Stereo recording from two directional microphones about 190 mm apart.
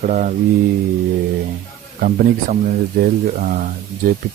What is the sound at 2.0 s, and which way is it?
Speech, 45° right (ahead or behind).